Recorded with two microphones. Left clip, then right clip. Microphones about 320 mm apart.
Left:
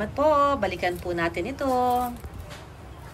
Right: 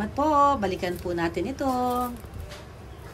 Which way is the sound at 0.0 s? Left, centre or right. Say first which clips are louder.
Even; centre.